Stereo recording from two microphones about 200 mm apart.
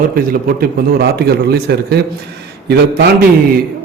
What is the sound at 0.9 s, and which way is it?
A man's voice, 50° right (ahead or behind).